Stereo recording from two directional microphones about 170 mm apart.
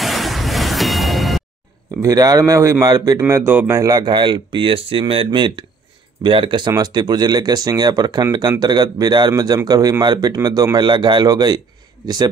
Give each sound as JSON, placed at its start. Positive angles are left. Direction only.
{"t": 0.0, "sound": "music", "side_deg": 0}
{"t": 2.0, "sound": "speech", "side_deg": -20}